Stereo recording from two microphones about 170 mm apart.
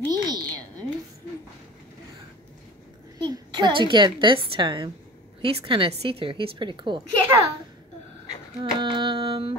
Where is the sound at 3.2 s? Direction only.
25° right (ahead or behind).